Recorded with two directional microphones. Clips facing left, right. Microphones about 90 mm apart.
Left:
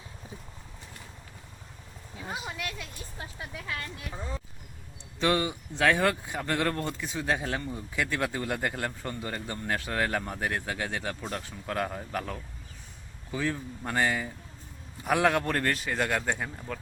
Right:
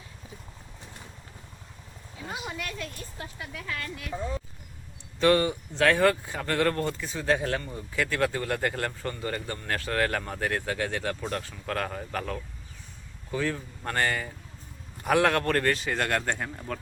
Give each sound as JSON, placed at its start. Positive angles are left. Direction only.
{"t": 2.5, "sound": "speech", "side_deg": 5}
{"t": 3.3, "sound": "speech", "side_deg": 25}
{"t": 5.2, "sound": "speech", "side_deg": 10}